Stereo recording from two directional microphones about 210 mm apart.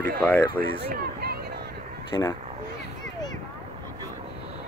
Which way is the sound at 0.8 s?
50° right (ahead or behind).